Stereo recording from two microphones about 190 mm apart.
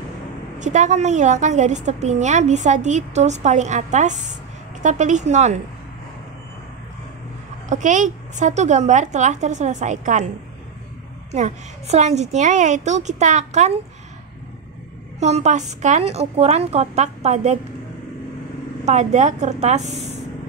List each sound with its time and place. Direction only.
0.6 s a woman's voice: 40° right (ahead or behind)
7.7 s a woman's voice: 40° right (ahead or behind)
11.3 s a woman's voice: 40° right (ahead or behind)
15.1 s a woman's voice: 35° right (ahead or behind)
18.9 s a woman's voice: 35° right (ahead or behind)